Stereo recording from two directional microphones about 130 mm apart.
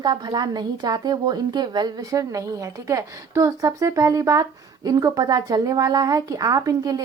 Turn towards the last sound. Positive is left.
turn(degrees=-30)  # may be behind; listen again after turning